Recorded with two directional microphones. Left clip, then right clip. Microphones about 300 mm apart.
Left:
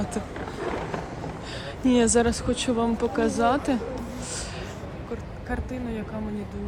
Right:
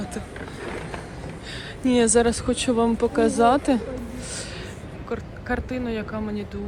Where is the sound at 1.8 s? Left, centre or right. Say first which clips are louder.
Right 2 dB; centre.